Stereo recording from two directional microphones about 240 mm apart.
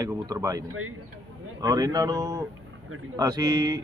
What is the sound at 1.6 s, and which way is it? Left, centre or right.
Speech, centre.